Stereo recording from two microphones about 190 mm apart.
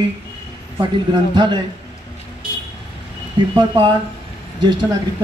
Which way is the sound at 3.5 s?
25° right (ahead or behind).